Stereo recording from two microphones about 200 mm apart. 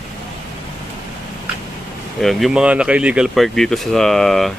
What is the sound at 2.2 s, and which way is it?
Speech, centre (ahead or behind).